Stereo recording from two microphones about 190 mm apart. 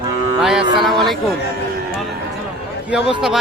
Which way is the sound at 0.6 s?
25° right (ahead or behind).